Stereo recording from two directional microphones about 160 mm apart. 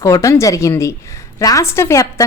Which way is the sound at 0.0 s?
20° left (ahead or behind).